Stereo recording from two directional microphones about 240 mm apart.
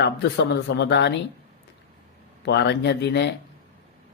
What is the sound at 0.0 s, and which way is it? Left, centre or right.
Speech, left.